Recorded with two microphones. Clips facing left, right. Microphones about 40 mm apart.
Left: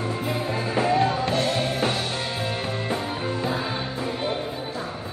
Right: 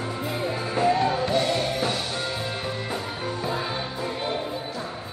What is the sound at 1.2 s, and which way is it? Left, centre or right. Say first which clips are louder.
Music: even; left.